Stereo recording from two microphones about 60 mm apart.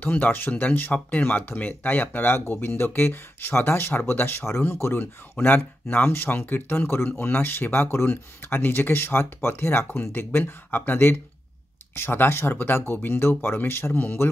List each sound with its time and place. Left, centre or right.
0.0 s speech: left